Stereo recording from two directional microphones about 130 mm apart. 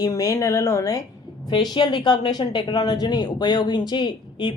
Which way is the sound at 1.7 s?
35° left (ahead or behind).